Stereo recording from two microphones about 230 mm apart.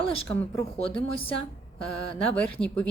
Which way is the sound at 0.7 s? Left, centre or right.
Left.